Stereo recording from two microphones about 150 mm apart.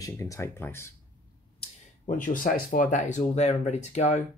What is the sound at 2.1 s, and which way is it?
Speech, 65° left (ahead or behind).